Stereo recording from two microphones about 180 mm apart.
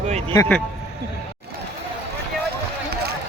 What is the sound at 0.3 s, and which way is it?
Speech, 10° left (ahead or behind).